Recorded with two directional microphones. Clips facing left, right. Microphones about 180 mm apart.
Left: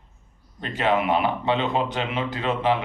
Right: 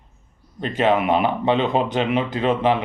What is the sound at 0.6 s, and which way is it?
Speech, 20° right (ahead or behind).